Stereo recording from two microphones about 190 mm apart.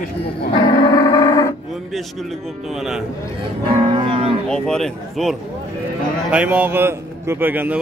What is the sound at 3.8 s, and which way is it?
Cattle, 25° right (ahead or behind).